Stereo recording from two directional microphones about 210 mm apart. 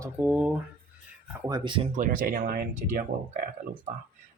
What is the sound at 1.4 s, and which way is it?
Speech, 20° right (ahead or behind).